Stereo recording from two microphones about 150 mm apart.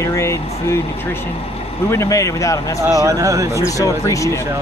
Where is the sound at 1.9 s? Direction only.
20° left (ahead or behind).